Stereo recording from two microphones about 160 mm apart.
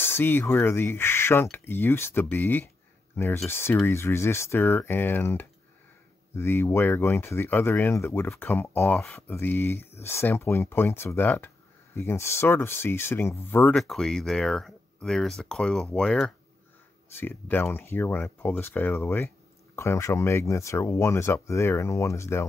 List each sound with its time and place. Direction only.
0.0 s speech: 15° left (ahead or behind)
13.7 s speech: 5° left (ahead or behind)